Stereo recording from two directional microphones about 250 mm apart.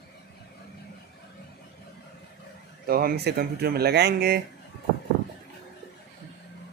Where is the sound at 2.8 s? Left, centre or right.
Right.